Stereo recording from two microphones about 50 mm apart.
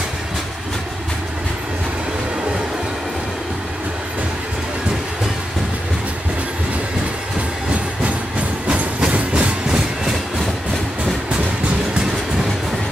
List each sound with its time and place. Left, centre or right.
8.6 s train: right